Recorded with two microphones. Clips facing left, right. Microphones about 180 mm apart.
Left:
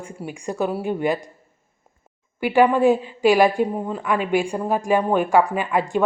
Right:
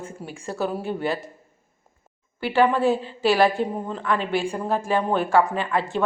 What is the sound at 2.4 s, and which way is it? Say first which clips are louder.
A woman's voice: left 4 dB; 15° left (ahead or behind).